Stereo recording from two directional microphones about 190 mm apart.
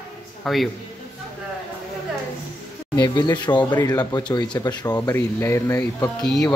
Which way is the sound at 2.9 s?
20° left (ahead or behind).